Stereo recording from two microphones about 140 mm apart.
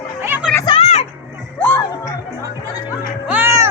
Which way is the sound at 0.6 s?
40° left (ahead or behind).